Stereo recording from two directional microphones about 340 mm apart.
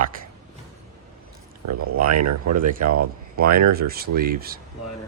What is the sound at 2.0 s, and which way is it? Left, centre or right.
Speech, right.